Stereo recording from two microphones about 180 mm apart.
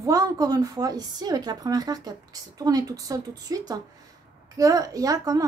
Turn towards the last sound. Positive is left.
turn(degrees=-20)  # may be behind; listen again after turning